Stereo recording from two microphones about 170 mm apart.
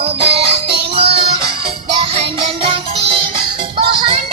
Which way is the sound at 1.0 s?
35° right (ahead or behind).